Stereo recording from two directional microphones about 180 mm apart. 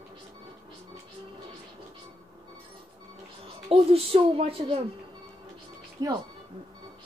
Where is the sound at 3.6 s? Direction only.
30° right (ahead or behind).